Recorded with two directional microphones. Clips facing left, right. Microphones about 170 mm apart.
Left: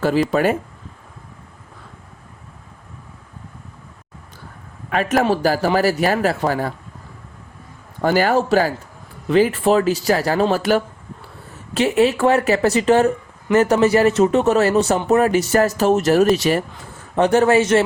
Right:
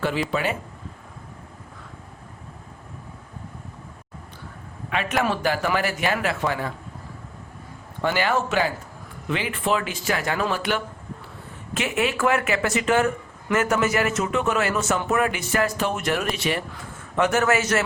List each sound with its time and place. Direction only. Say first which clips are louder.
0.0 s speech: left 8 dB; 40° left (ahead or behind)
4.9 s speech: left 6 dB; 45° left (ahead or behind)
8.0 s speech: left 6 dB; 40° left (ahead or behind)